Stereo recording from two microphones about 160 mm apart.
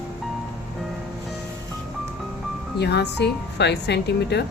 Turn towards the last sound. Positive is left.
turn(degrees=90)